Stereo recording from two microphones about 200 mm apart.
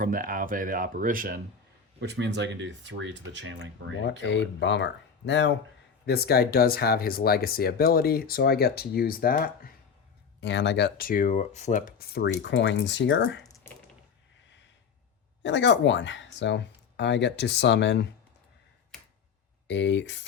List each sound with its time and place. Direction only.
0.0 s speech: 45° right (ahead or behind)
2.0 s speech: 60° right (ahead or behind)
4.3 s speech: 65° left (ahead or behind); by 9.7 s 45° left (ahead or behind)
10.4 s speech: 60° left (ahead or behind)
15.4 s speech: 65° left (ahead or behind)
19.6 s speech: 65° left (ahead or behind)